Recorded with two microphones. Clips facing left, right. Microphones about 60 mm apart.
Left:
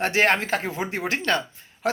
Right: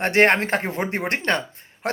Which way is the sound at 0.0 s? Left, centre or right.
Right.